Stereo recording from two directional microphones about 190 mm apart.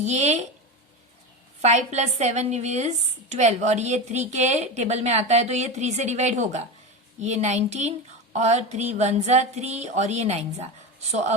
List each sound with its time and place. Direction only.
0.0 s a woman's voice: 35° right (ahead or behind)
1.6 s a woman's voice: 35° right (ahead or behind)